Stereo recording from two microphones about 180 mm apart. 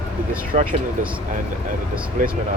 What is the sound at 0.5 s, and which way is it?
Speech, 40° right (ahead or behind).